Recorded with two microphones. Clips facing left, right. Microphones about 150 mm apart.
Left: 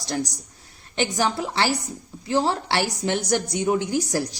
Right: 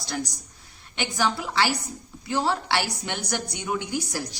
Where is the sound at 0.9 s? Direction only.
40° left (ahead or behind).